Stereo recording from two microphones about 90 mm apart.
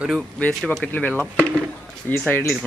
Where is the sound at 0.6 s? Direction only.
5° left (ahead or behind).